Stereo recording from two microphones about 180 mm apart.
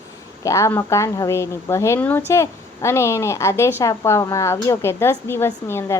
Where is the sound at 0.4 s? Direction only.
15° left (ahead or behind).